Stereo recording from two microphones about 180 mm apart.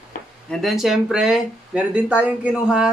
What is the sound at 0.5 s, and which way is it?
Speech, centre (ahead or behind).